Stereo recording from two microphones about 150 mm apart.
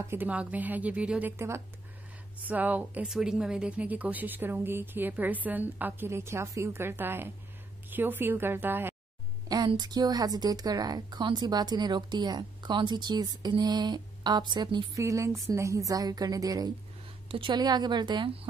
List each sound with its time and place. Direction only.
0.1 s a woman's voice: 10° right (ahead or behind)
2.4 s a woman's voice: 10° right (ahead or behind)
9.5 s a woman's voice: 30° right (ahead or behind)